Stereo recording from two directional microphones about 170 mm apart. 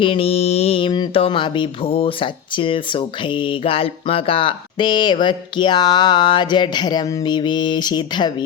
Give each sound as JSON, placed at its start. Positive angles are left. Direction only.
{"t": 0.0, "sound": "speech", "side_deg": 30}